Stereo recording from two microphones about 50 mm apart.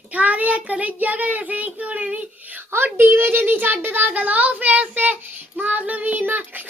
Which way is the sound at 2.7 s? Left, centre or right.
Right.